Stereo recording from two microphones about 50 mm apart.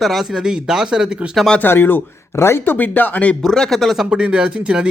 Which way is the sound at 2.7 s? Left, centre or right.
Left.